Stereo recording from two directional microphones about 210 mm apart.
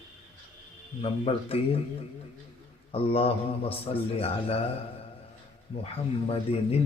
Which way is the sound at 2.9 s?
25° left (ahead or behind).